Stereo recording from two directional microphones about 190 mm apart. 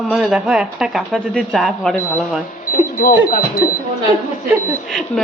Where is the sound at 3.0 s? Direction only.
50° left (ahead or behind).